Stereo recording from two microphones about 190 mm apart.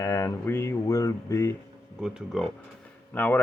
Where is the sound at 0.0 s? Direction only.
15° left (ahead or behind).